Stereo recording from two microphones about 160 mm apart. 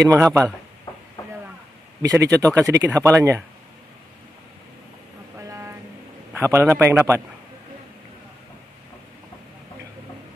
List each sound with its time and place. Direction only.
0.1 s a man's voice: 15° right (ahead or behind)
2.0 s speech: 20° right (ahead or behind)
5.4 s vehicle: 20° right (ahead or behind)
6.3 s a man's voice: 15° right (ahead or behind)